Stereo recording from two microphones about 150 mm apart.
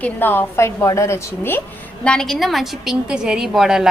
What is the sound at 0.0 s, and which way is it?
A woman's voice, 15° left (ahead or behind).